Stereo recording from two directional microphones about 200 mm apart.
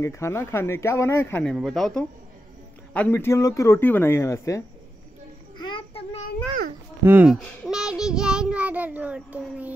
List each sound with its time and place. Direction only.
0.0 s speech: 15° left (ahead or behind)
5.6 s child singing: 25° left (ahead or behind)
7.1 s a child's voice: 5° right (ahead or behind)